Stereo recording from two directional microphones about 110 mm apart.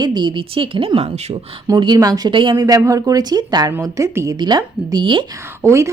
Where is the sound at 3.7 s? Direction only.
30° right (ahead or behind).